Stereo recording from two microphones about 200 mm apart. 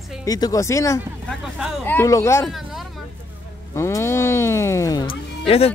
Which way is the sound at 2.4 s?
Centre (ahead or behind).